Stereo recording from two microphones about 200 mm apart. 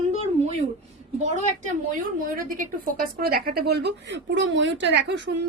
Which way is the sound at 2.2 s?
45° right (ahead or behind).